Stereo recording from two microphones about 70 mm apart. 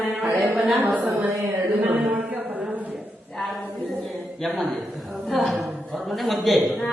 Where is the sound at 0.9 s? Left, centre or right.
Right.